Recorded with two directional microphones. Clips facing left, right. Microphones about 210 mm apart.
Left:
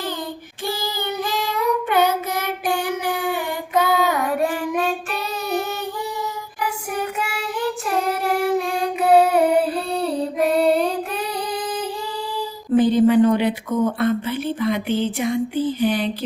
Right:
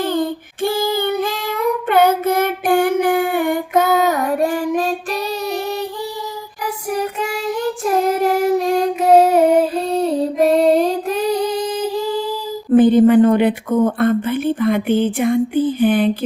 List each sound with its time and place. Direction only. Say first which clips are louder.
0.0 s child singing: right 9 dB; 55° right (ahead or behind)
6.9 s child singing: right 8 dB; 40° right (ahead or behind)
8.0 s singing: right 5 dB; 40° right (ahead or behind)
12.7 s speech: right 5 dB; 55° right (ahead or behind)